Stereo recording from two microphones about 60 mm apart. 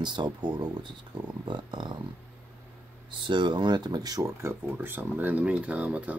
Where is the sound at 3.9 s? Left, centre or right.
Right.